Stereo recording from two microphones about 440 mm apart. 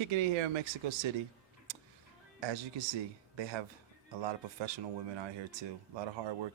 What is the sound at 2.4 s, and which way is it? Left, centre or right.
Speech, right.